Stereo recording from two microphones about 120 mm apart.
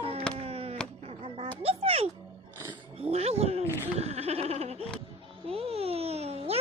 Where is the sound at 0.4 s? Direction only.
55° right (ahead or behind).